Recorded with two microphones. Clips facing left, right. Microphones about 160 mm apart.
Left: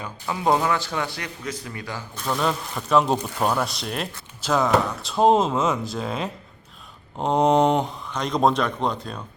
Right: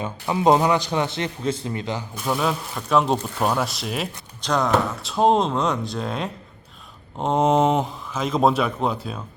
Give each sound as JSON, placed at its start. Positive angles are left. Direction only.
{"t": 0.0, "sound": "a man's voice", "side_deg": -20}